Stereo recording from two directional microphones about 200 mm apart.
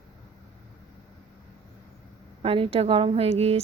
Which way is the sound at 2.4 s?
30° right (ahead or behind).